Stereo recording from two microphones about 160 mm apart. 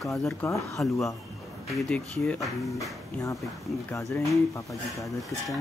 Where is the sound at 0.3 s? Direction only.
15° left (ahead or behind).